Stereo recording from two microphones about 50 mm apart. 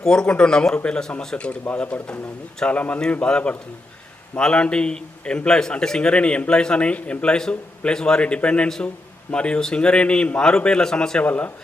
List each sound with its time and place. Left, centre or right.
0.0 s a man's voice: centre
11.2 s a man's voice: left